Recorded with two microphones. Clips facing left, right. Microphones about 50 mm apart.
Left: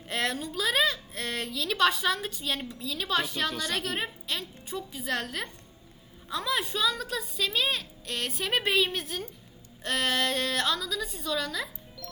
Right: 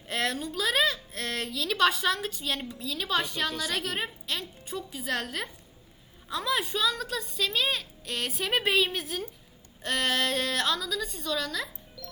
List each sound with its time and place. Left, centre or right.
0.1 s a woman's voice: centre